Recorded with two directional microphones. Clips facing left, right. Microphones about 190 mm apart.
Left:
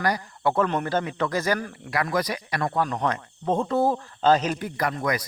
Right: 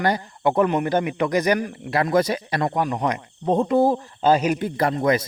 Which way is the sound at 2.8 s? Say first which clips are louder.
Right 3 dB; 15° right (ahead or behind).